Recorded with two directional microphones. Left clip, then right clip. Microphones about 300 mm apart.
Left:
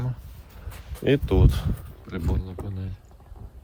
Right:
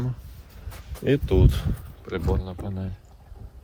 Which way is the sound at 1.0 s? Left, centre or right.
Left.